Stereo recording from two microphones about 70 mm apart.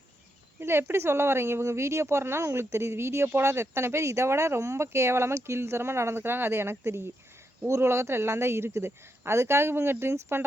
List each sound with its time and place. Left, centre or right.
0.6 s speech: right